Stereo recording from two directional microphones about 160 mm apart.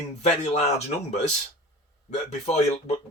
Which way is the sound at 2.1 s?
45° left (ahead or behind).